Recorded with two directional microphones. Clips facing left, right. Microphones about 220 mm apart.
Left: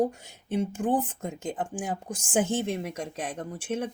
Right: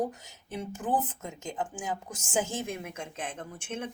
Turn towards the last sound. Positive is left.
turn(degrees=35)  # may be behind; listen again after turning